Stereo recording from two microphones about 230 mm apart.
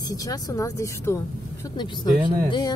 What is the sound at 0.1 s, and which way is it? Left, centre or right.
Speech, centre.